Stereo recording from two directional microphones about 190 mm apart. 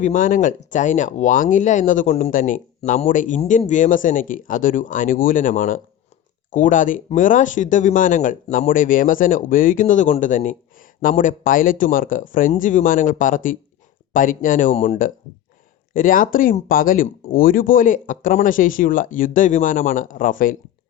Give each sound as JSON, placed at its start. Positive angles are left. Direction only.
{"t": 0.0, "sound": "speech", "side_deg": 45}
{"t": 14.7, "sound": "speech", "side_deg": 30}
{"t": 16.0, "sound": "speech", "side_deg": 45}